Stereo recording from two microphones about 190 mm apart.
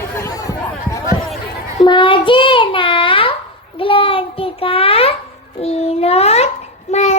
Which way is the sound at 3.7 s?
30° left (ahead or behind).